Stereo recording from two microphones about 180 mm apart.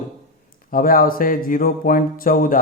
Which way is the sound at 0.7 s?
50° left (ahead or behind).